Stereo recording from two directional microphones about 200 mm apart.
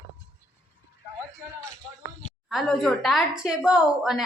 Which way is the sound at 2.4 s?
Centre (ahead or behind).